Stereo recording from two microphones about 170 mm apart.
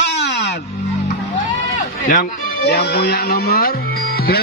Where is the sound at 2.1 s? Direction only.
65° left (ahead or behind).